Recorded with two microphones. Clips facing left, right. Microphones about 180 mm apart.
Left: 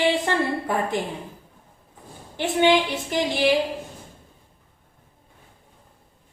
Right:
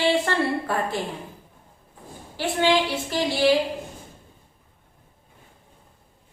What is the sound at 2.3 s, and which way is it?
A woman's voice, 20° left (ahead or behind).